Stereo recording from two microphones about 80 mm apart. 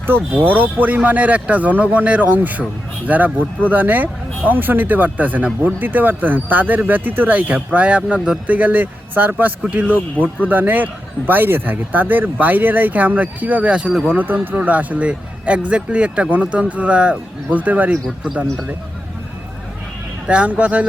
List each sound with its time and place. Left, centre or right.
0.1 s speech: right
20.2 s speech: centre